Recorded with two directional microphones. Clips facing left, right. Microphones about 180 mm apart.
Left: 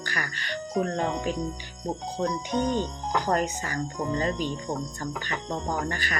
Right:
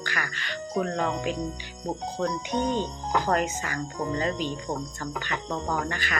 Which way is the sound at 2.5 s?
45° left (ahead or behind).